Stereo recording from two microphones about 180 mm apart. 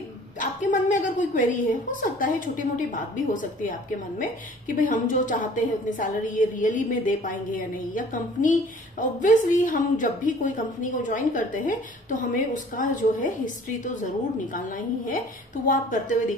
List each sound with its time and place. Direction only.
0.4 s a woman's voice: 45° left (ahead or behind)
4.7 s a woman's voice: 45° left (ahead or behind)
14.5 s a woman's voice: 50° left (ahead or behind)